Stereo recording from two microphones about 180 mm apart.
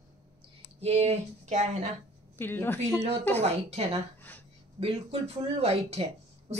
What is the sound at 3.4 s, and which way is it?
Speech, 35° right (ahead or behind).